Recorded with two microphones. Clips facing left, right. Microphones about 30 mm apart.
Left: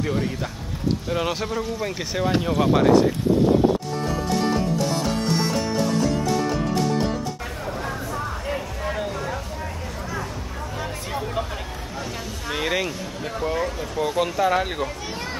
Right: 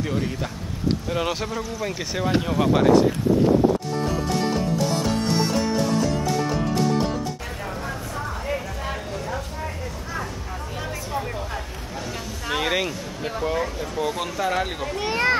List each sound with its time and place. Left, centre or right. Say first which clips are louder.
0.0 s speech: left 1 dB; centre
4.1 s music: left 3 dB; centre
8.1 s music: even; centre
12.4 s speech: right 1 dB; centre
15.0 s a sound: right 9 dB; right